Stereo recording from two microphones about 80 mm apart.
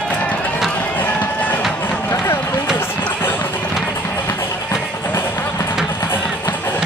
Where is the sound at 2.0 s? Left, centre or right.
Left.